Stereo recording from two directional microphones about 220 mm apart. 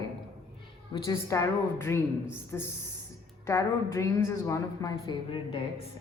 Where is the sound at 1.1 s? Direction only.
15° left (ahead or behind).